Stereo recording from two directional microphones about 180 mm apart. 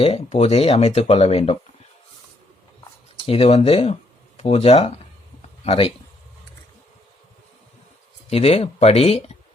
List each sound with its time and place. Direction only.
0.0 s speech: 35° left (ahead or behind)
3.2 s a man's voice: 35° left (ahead or behind)
8.3 s speech: 35° left (ahead or behind)